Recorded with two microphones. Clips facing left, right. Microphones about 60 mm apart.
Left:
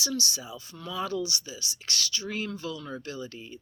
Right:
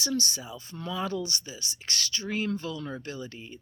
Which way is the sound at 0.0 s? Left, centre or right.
Right.